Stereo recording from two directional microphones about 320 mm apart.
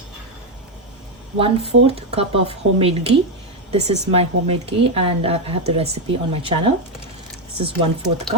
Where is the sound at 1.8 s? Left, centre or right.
Centre.